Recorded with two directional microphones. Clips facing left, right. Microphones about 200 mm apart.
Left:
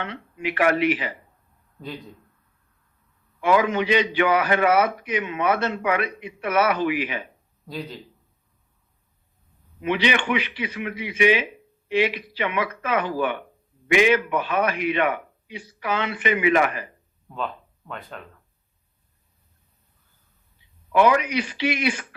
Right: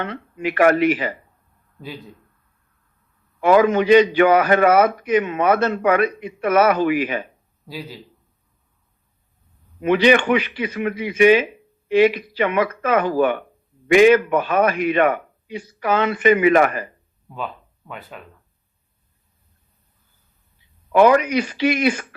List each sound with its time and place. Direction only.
0.0 s a man's voice: 45° right (ahead or behind)
3.4 s a man's voice: 45° right (ahead or behind)
7.7 s a man's voice: 5° right (ahead or behind)
9.8 s a man's voice: 45° right (ahead or behind)
17.2 s speech: 5° right (ahead or behind)
20.9 s a man's voice: 45° right (ahead or behind)